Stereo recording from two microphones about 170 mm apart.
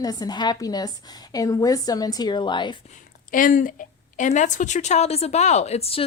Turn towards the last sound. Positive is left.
turn(degrees=35)  # may be behind; listen again after turning